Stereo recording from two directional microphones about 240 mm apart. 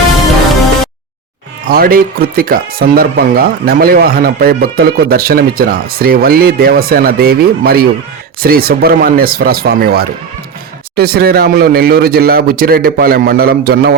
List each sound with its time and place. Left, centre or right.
1.6 s speech: right